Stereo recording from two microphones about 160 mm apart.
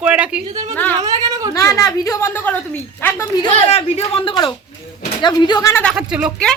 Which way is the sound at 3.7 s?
40° left (ahead or behind).